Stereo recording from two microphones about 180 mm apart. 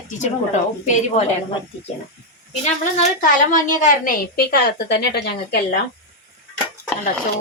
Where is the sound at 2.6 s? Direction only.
40° left (ahead or behind); by 5.8 s 60° left (ahead or behind).